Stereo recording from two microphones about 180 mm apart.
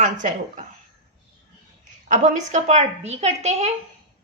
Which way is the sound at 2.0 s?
40° right (ahead or behind).